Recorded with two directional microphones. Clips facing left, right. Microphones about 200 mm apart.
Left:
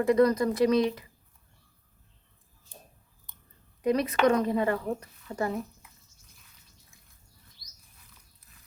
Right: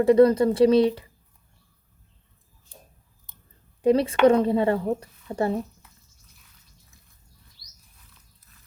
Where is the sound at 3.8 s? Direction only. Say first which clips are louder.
Right 6 dB; 30° right (ahead or behind).